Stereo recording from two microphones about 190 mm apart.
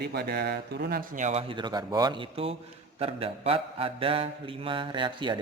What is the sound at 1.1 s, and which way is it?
Speech, 40° right (ahead or behind).